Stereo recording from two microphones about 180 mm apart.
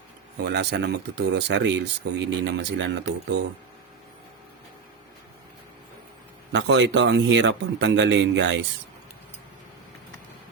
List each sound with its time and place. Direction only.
0.3 s speech: 70° right (ahead or behind)
6.5 s a man's voice: 85° right